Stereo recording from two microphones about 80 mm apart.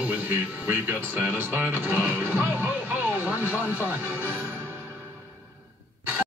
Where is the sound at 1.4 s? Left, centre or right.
Right.